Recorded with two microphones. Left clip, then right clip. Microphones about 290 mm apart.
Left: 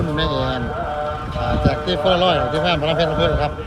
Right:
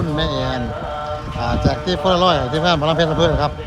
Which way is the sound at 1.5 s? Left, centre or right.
Centre.